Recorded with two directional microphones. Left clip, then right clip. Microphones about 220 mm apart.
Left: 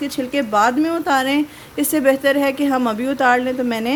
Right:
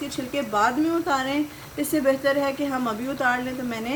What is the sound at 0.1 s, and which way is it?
A woman's voice, 55° left (ahead or behind).